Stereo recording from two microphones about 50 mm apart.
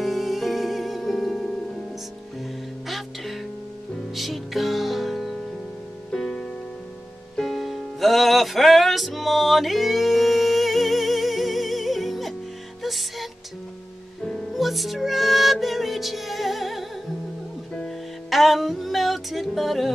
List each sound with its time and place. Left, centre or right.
0.0 s music: centre
4.1 s music: centre
6.2 s music: centre
7.3 s music: centre
14.2 s music: centre
14.5 s music: centre
17.8 s music: centre